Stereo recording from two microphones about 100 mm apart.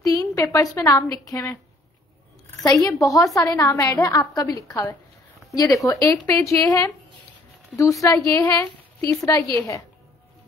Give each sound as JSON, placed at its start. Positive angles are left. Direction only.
{"t": 0.0, "sound": "a sound", "side_deg": 35}
{"t": 0.7, "sound": "a woman's voice", "side_deg": 35}
{"t": 2.6, "sound": "a woman's voice", "side_deg": 45}
{"t": 8.0, "sound": "a woman's voice", "side_deg": 35}